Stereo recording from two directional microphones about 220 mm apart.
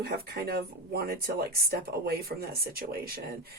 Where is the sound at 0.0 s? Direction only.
45° right (ahead or behind).